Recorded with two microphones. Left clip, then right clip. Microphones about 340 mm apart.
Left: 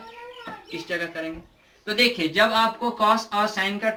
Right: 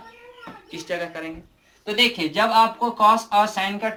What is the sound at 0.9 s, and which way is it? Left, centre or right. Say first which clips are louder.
Speech: even; centre.